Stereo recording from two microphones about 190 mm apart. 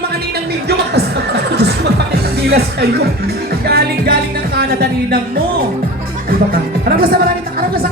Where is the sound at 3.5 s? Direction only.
55° right (ahead or behind).